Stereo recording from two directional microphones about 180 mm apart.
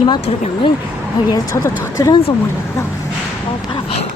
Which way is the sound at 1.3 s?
20° left (ahead or behind).